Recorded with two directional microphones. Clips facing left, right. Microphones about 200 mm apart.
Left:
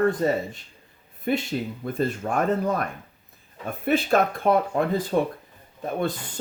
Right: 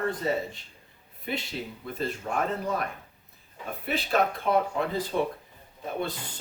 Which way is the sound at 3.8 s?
50° left (ahead or behind).